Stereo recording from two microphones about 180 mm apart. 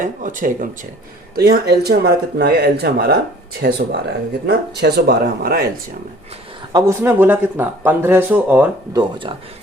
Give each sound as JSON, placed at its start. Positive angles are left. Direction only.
{"t": 0.0, "sound": "speech", "side_deg": -45}
{"t": 1.4, "sound": "speech", "side_deg": -60}
{"t": 6.7, "sound": "speech", "side_deg": -15}
{"t": 9.0, "sound": "speech", "side_deg": -30}